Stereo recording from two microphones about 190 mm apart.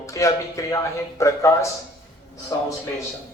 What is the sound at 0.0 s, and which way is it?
Speech, 15° left (ahead or behind).